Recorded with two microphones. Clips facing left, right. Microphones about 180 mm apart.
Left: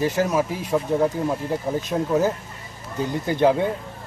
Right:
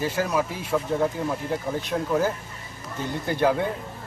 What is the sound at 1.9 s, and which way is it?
Speech, 15° left (ahead or behind).